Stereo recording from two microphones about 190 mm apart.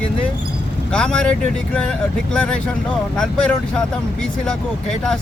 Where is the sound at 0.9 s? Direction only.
5° left (ahead or behind).